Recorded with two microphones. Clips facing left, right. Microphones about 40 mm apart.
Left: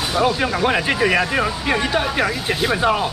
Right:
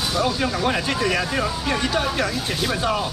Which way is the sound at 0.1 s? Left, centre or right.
Left.